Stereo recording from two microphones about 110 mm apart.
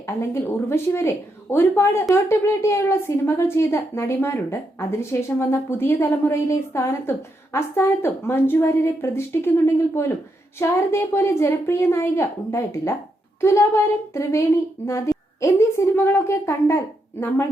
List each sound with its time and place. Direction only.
0.0 s speech: 25° left (ahead or behind)